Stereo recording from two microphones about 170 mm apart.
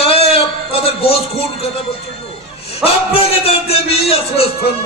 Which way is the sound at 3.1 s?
35° left (ahead or behind).